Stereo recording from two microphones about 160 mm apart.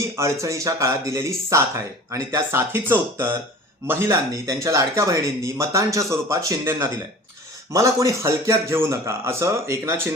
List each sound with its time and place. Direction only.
0.2 s a man's voice: 20° right (ahead or behind)